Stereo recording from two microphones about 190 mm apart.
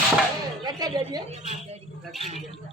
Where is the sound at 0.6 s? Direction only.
20° right (ahead or behind).